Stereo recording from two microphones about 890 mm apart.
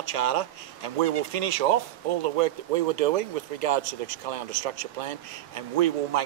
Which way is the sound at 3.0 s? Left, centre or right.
Right.